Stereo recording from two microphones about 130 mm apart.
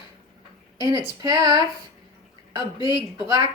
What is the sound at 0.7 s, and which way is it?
Speech, 30° right (ahead or behind).